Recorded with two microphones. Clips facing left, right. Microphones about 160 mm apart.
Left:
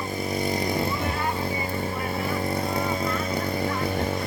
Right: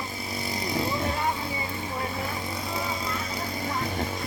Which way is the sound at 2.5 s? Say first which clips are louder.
Left 5 dB; 55° left (ahead or behind).